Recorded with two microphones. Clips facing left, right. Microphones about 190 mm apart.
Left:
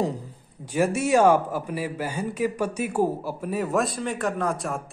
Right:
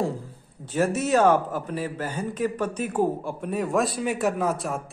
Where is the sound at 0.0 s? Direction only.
15° left (ahead or behind).